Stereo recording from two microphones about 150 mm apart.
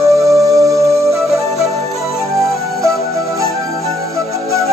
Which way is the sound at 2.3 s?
20° right (ahead or behind).